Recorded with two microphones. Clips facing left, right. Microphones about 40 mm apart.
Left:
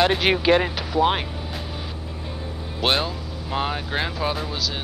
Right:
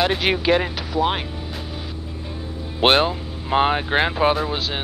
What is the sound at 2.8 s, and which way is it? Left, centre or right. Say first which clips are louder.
Speech: right 6 dB; right.